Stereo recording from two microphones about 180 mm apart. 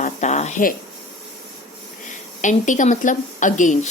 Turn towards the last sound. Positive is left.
turn(degrees=45)  # may be behind; listen again after turning